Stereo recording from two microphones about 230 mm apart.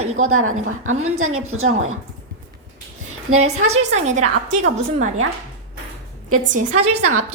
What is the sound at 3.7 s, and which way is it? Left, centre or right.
Speech, right.